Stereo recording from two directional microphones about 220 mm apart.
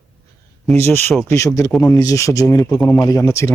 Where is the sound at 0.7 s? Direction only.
10° left (ahead or behind).